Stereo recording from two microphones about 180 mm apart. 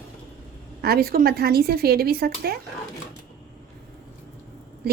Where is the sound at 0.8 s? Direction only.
55° right (ahead or behind).